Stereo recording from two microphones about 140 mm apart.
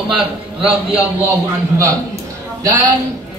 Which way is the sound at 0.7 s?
10° right (ahead or behind).